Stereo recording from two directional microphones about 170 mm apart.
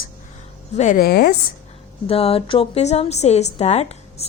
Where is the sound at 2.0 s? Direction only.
35° left (ahead or behind).